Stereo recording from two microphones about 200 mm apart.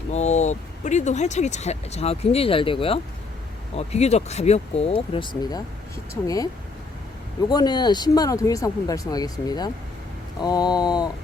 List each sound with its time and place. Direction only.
0.1 s speech: 35° left (ahead or behind)